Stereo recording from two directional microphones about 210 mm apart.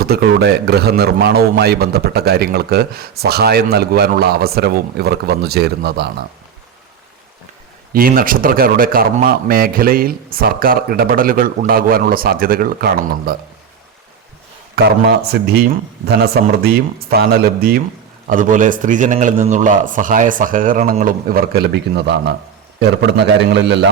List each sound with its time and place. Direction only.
0.0 s a man's voice: 45° right (ahead or behind)
7.9 s a man's voice: 45° right (ahead or behind)
15.0 s a man's voice: 50° right (ahead or behind)